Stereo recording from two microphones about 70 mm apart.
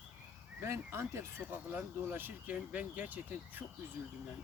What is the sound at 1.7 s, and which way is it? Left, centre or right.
Speech, right.